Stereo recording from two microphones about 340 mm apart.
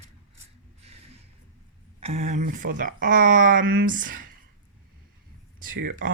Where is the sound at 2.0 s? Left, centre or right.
Centre.